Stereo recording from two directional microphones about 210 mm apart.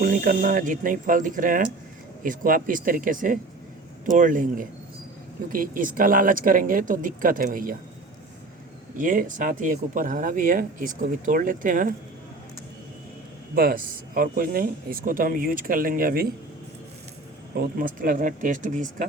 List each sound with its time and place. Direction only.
0.0 s speech: 40° right (ahead or behind)
9.0 s speech: 40° right (ahead or behind)
13.6 s speech: 45° right (ahead or behind)
17.6 s speech: 40° right (ahead or behind)